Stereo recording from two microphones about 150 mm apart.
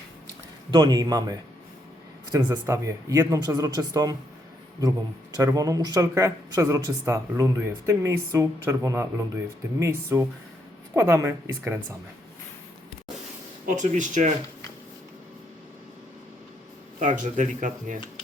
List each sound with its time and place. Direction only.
0.7 s speech: 30° right (ahead or behind)
13.7 s speech: 55° right (ahead or behind)
17.0 s speech: 55° right (ahead or behind)